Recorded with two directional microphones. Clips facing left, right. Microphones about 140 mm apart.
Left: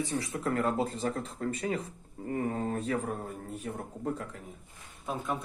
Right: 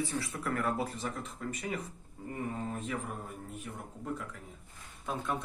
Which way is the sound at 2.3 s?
55° left (ahead or behind).